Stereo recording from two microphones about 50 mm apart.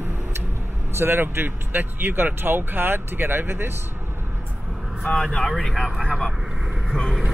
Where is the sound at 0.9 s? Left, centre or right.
Right.